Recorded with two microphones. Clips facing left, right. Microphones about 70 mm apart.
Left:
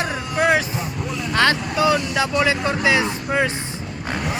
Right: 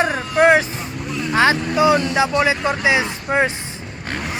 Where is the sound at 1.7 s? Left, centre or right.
Right.